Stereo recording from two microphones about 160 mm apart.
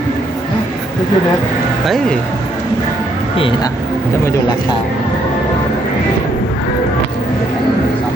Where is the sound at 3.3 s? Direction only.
35° left (ahead or behind).